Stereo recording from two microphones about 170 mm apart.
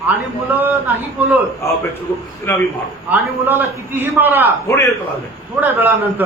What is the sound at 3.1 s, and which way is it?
A man's voice, 10° right (ahead or behind).